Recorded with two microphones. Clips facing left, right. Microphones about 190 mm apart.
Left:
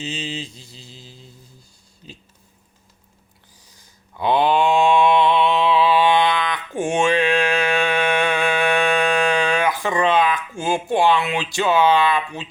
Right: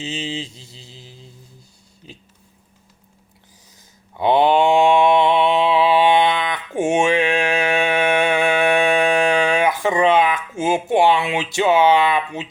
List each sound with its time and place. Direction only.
0.0 s mantra: 25° right (ahead or behind)
4.2 s mantra: 25° right (ahead or behind)